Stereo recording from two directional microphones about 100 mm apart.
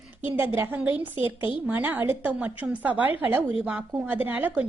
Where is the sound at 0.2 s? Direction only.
20° right (ahead or behind).